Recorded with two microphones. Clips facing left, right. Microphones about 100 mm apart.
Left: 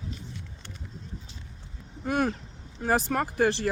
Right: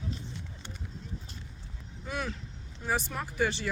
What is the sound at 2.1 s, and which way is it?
Speech, 50° left (ahead or behind).